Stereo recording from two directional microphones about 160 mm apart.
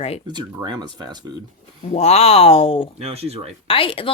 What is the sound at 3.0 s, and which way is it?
Speech, 40° right (ahead or behind).